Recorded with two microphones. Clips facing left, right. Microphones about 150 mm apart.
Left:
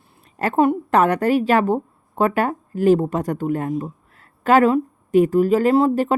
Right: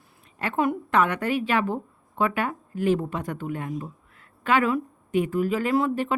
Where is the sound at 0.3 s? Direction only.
40° left (ahead or behind).